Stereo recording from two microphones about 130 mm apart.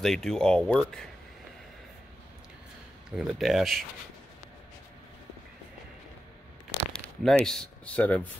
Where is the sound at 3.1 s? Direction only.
5° right (ahead or behind).